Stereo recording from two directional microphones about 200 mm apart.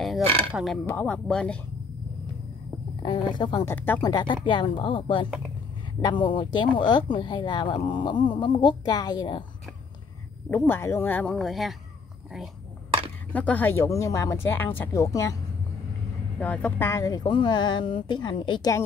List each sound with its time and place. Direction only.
0.0 s speech: centre (ahead or behind)
3.0 s speech: 25° left (ahead or behind)
3.7 s speech: 10° left (ahead or behind)
4.0 s speech: 20° left (ahead or behind)
10.5 s speech: 10° left (ahead or behind)
13.3 s speech: 5° left (ahead or behind)
16.3 s speech: 5° left (ahead or behind)